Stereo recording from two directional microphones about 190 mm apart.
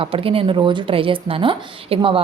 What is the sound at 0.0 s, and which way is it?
Speech, 30° right (ahead or behind).